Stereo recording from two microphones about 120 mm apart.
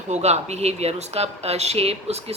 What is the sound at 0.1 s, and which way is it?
Speech, 65° right (ahead or behind).